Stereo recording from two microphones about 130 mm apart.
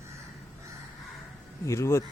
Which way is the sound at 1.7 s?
20° left (ahead or behind).